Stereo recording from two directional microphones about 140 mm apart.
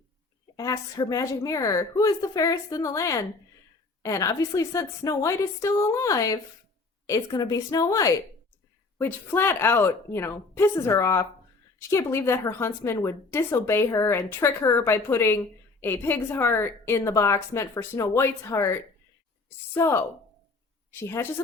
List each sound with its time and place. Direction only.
0.5 s a woman's voice: 25° left (ahead or behind)